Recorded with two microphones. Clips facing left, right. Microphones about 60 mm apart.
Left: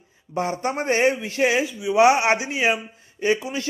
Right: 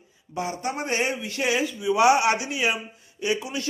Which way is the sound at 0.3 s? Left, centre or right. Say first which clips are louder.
Left 4 dB; left.